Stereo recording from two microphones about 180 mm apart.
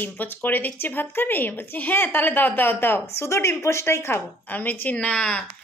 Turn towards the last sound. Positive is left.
turn(degrees=5)  # may be behind; listen again after turning